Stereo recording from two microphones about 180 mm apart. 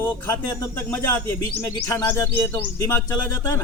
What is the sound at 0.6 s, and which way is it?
Speech, 15° left (ahead or behind).